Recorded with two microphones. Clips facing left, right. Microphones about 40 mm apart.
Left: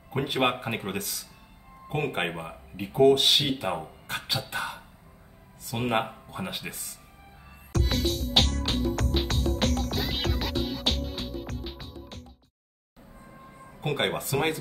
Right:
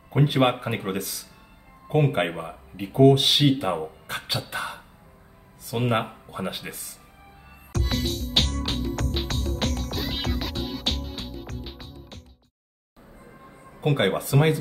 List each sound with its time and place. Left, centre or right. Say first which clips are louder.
0.1 s speech: right 5 dB; centre
7.7 s music: even; centre
13.3 s music: even; centre